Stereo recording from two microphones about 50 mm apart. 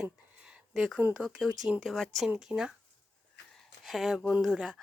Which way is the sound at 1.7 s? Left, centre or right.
Centre.